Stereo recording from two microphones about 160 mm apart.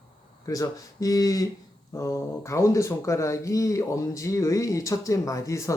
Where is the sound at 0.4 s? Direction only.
20° left (ahead or behind).